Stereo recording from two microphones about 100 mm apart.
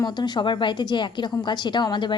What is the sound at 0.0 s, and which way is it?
A woman's voice, 50° left (ahead or behind).